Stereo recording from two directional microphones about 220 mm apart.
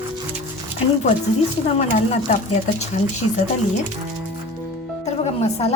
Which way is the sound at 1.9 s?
35° left (ahead or behind).